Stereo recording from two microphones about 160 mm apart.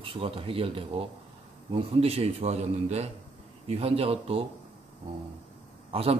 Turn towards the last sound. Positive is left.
turn(degrees=-40)  # may be behind; listen again after turning